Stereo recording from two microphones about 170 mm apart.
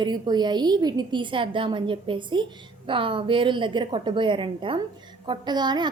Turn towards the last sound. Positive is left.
turn(degrees=-25)  # may be behind; listen again after turning